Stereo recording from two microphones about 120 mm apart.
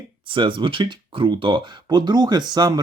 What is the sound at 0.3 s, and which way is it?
Speech, 45° right (ahead or behind).